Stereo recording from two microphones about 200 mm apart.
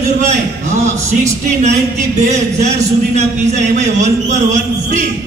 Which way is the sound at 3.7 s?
35° right (ahead or behind).